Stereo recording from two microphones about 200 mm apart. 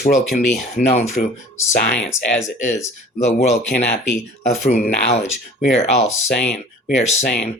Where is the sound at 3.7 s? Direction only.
50° left (ahead or behind).